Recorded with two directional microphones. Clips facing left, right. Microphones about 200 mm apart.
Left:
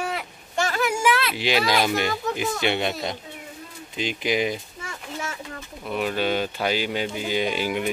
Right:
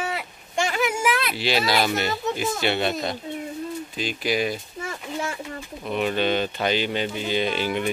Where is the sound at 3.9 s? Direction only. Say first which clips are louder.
Left 2 dB; 20° left (ahead or behind).